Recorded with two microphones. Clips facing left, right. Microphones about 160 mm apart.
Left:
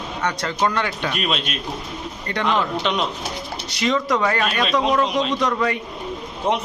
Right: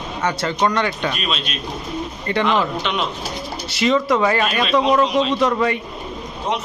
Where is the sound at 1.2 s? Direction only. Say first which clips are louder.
Left 1 dB; 55° left (ahead or behind).